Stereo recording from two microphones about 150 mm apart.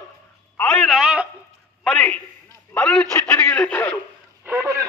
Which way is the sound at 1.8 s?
10° left (ahead or behind).